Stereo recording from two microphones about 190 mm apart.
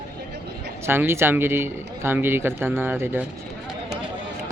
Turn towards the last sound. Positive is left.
turn(degrees=-10)  # may be behind; listen again after turning